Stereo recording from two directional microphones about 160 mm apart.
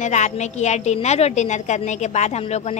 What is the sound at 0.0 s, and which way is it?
A woman's voice, 50° left (ahead or behind).